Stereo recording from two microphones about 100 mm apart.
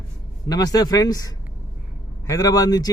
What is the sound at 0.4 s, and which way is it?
Speech, 40° left (ahead or behind).